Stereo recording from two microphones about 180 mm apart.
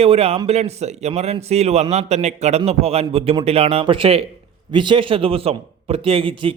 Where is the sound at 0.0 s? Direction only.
35° right (ahead or behind).